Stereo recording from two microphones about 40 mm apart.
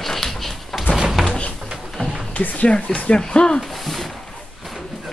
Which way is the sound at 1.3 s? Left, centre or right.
Left.